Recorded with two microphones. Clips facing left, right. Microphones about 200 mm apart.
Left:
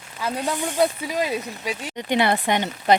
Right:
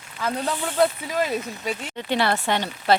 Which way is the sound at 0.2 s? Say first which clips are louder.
Left 1 dB; 10° left (ahead or behind).